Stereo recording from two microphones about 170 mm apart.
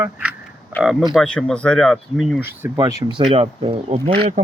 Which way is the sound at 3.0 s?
25° right (ahead or behind).